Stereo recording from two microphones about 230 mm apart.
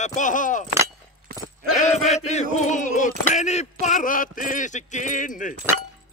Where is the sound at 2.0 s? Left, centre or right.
Left.